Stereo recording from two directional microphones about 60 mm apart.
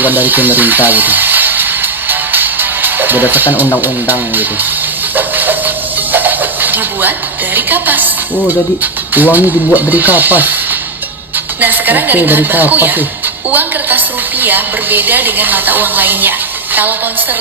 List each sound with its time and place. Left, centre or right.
0.0 s speech: right
2.0 s music: right
3.8 s a woman's voice: right
5.1 s music: right
7.5 s a woman's voice: right
11.6 s a woman's voice: right